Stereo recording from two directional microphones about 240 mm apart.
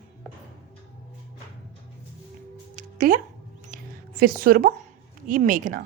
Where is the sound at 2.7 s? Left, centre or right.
Right.